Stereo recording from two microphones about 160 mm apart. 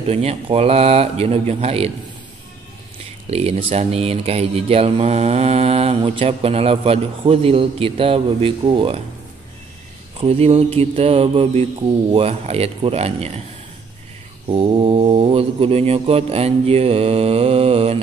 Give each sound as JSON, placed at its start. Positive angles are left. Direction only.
{"t": 0.0, "sound": "speech", "side_deg": -40}
{"t": 3.3, "sound": "speech", "side_deg": -40}
{"t": 10.1, "sound": "speech", "side_deg": -40}
{"t": 14.5, "sound": "speech", "side_deg": -35}